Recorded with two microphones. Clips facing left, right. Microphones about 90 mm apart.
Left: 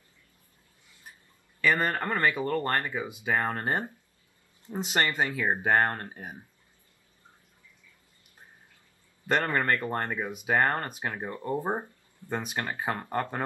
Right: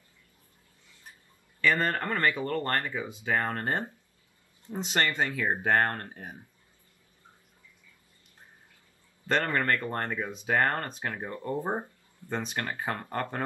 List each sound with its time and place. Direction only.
1.6 s speech: 15° left (ahead or behind)
9.3 s speech: 20° left (ahead or behind)